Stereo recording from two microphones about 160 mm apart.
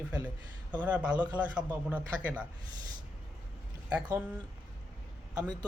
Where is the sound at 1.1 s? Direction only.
25° right (ahead or behind).